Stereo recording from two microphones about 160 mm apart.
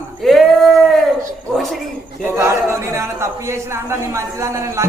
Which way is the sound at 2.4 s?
15° right (ahead or behind).